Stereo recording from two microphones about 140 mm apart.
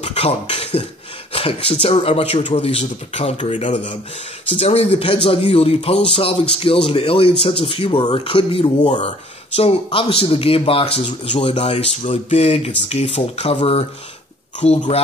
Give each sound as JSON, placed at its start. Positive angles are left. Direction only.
{"t": 0.0, "sound": "a sound", "side_deg": 45}
{"t": 1.3, "sound": "speech", "side_deg": 45}
{"t": 4.6, "sound": "speech", "side_deg": 45}
{"t": 8.8, "sound": "speech", "side_deg": 55}
{"t": 9.6, "sound": "speech", "side_deg": 45}